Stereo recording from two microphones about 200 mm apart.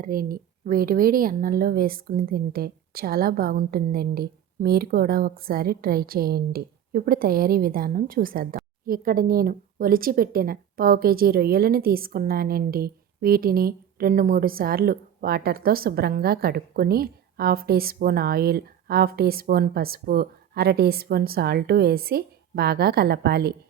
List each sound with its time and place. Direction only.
0.0 s a woman's voice: 45° right (ahead or behind)